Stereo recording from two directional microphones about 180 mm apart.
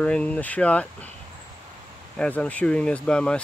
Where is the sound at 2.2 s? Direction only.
5° left (ahead or behind).